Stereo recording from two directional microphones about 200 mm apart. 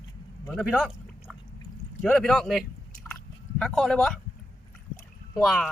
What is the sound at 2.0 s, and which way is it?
Speech, 5° left (ahead or behind).